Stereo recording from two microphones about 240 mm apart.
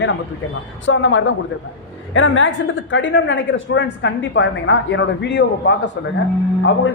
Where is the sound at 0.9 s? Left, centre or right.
Left.